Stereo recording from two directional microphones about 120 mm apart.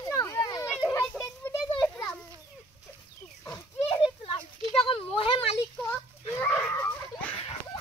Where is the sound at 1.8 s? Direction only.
25° left (ahead or behind).